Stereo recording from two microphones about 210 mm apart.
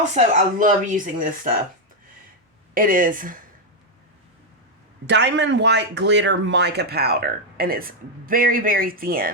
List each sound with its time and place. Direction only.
0.0 s speech: 40° right (ahead or behind)
2.7 s speech: 40° right (ahead or behind)
5.0 s speech: 55° right (ahead or behind)